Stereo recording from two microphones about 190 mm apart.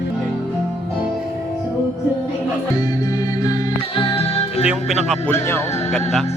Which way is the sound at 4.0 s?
30° left (ahead or behind).